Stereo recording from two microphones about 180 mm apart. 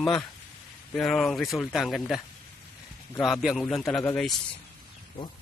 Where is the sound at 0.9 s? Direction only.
Centre (ahead or behind).